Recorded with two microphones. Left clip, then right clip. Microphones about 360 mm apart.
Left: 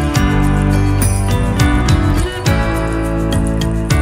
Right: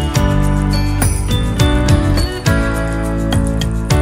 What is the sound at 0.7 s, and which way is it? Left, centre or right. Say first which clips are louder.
Music: left 1 dB; centre.